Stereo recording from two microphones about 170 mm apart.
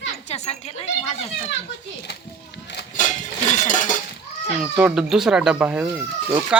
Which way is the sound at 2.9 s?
45° left (ahead or behind).